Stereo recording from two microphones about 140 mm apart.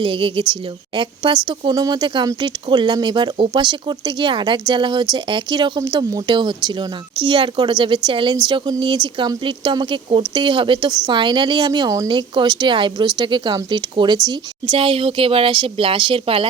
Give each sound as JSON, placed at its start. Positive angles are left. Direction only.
{"t": 0.0, "sound": "speech", "side_deg": -40}